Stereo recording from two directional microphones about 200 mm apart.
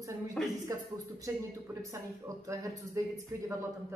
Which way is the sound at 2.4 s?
15° right (ahead or behind).